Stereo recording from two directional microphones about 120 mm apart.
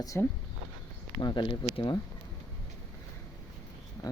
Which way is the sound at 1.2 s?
40° left (ahead or behind).